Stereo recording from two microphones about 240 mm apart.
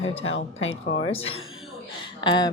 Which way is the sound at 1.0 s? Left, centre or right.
Left.